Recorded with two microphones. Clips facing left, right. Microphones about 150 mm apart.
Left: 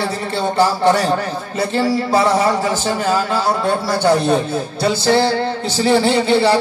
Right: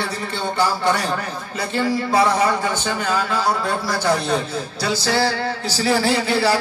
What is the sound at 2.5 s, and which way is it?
Speech, 35° left (ahead or behind).